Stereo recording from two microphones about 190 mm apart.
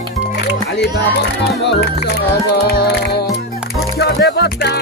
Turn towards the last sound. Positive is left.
turn(degrees=60)  # may be behind; listen again after turning